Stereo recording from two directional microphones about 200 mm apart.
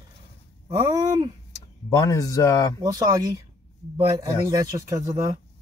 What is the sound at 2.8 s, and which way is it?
Speech, 20° right (ahead or behind).